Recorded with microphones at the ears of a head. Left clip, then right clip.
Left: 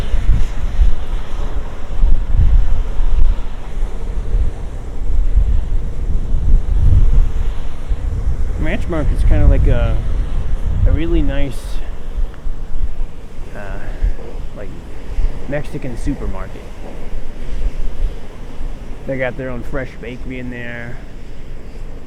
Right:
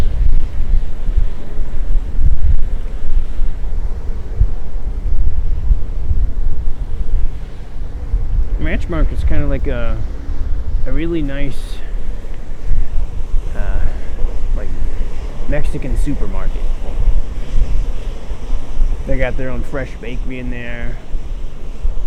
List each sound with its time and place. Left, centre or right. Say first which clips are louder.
6.5 s vehicle: left 8 dB; left
8.6 s speech: left 1 dB; centre
10.8 s speech: even; centre
15.4 s speech: even; centre
19.1 s speech: even; centre